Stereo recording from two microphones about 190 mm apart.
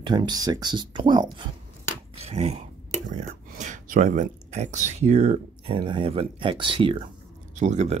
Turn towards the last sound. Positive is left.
turn(degrees=-40)  # may be behind; listen again after turning